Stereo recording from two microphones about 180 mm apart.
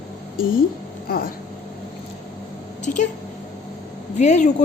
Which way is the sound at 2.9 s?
45° left (ahead or behind).